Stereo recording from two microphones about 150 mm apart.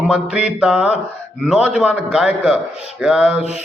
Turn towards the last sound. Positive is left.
turn(degrees=-5)  # may be behind; listen again after turning